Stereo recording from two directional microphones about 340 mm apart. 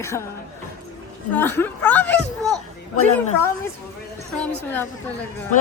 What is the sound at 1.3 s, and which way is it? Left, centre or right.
Speech, centre.